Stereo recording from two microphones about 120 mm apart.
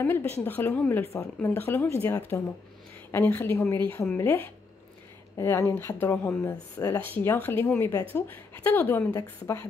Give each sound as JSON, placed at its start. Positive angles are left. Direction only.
{"t": 0.0, "sound": "a woman's voice", "side_deg": 20}